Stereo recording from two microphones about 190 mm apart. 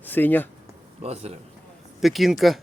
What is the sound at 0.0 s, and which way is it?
Speech, 10° left (ahead or behind).